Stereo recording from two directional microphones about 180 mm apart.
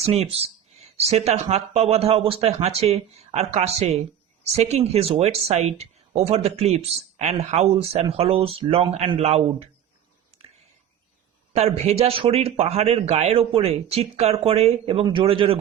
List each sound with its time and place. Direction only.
0.0 s speech: 35° right (ahead or behind)
11.5 s speech: 35° right (ahead or behind)